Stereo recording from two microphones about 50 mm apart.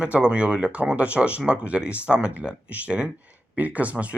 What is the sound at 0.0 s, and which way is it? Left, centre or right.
Speech, right.